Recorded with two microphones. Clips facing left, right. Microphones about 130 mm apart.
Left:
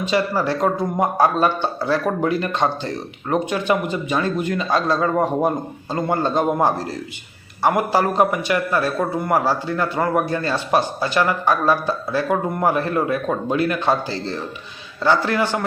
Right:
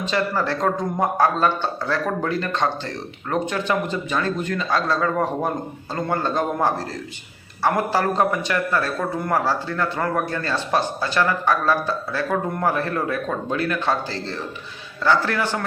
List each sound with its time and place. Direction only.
0.0 s a man's voice: 10° left (ahead or behind)